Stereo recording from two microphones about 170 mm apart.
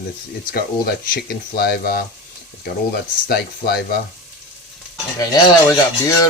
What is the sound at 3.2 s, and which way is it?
Speech, 70° left (ahead or behind).